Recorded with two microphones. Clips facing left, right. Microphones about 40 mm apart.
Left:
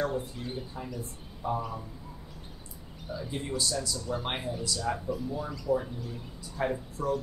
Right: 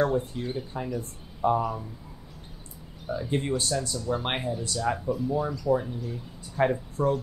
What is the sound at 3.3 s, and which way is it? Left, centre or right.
Speech, right.